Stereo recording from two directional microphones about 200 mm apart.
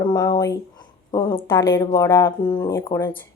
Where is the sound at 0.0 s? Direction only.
20° left (ahead or behind).